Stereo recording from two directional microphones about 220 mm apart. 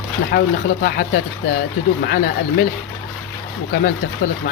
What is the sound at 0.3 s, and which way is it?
Speech, 45° left (ahead or behind).